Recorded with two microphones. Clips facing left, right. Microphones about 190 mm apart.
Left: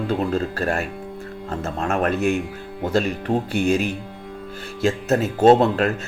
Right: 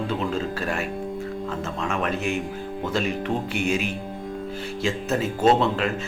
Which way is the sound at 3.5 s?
35° left (ahead or behind).